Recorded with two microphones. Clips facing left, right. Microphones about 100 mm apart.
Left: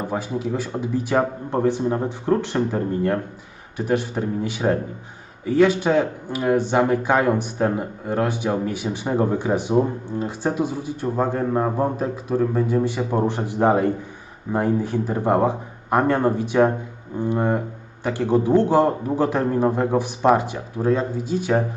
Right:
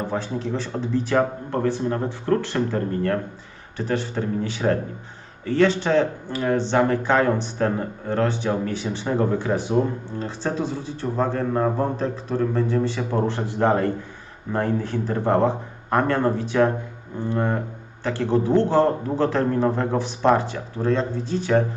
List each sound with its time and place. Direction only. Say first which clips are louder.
0.0 s speech: left 1 dB; 10° left (ahead or behind)